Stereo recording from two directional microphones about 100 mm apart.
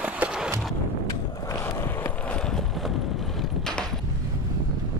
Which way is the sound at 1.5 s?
30° left (ahead or behind).